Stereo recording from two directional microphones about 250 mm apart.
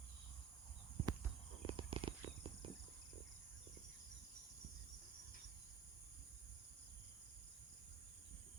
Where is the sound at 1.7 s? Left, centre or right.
Right.